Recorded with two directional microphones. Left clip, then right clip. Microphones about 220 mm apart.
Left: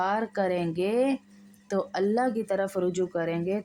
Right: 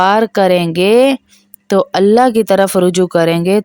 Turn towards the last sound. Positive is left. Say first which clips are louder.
# right 17 dB
turn(degrees=-50)  # may be behind; listen again after turning